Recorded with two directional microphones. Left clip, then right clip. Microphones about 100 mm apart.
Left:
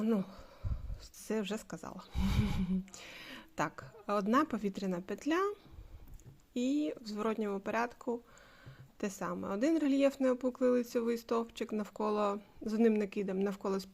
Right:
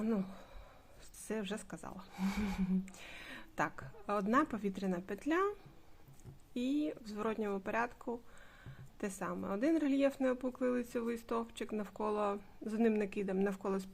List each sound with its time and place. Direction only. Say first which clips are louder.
0.0 s a sound: left 3 dB; 25° left (ahead or behind)
1.3 s speech: left 4 dB; 35° left (ahead or behind)
2.2 s speech: left 1 dB; 15° left (ahead or behind)
2.9 s a woman's voice: left 1 dB; 25° left (ahead or behind)